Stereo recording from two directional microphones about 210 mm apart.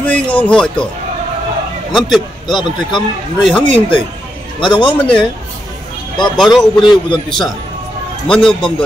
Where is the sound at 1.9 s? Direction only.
Centre (ahead or behind).